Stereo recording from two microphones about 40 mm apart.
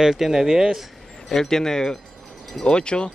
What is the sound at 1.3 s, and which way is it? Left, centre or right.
Speech, centre.